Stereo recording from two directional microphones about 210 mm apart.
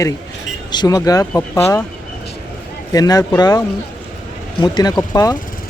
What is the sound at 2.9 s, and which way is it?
Speech, 15° left (ahead or behind).